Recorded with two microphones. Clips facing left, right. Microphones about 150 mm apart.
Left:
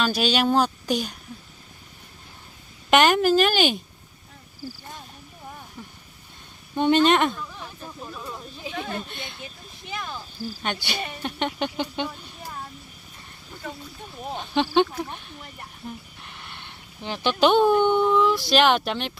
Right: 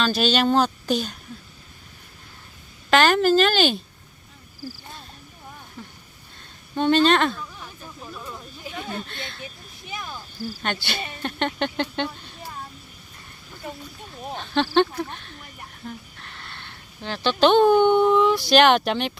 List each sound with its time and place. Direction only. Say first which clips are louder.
0.0 s speech: right 1 dB; 10° left (ahead or behind)
2.9 s speech: even; 15° left (ahead or behind)
4.6 s cricket: even; 15° left (ahead or behind)
6.7 s speech: even; 15° left (ahead or behind)
8.7 s a sound: left 2 dB; 5° right (ahead or behind)
9.0 s speech: right 1 dB; 15° left (ahead or behind)
10.6 s speech: even; 10° left (ahead or behind)
14.3 s speech: right 1 dB; 15° left (ahead or behind)